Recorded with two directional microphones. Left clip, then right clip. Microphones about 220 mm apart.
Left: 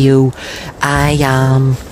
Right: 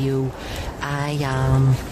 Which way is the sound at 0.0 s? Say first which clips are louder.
Left 13 dB; 35° left (ahead or behind).